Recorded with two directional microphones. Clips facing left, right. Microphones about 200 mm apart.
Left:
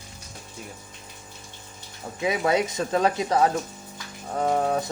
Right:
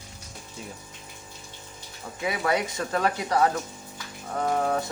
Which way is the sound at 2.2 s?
25° left (ahead or behind).